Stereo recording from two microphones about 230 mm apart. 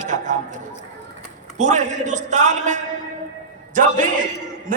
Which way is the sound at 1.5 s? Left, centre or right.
Right.